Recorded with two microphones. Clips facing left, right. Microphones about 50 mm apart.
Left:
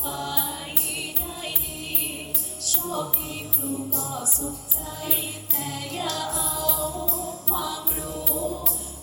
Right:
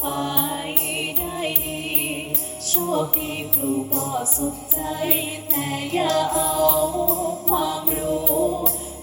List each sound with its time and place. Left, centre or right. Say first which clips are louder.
0.0 s music: right 6 dB; right
2.6 s music: right 7 dB; right